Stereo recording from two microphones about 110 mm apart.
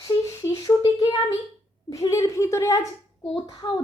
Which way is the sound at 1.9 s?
30° left (ahead or behind).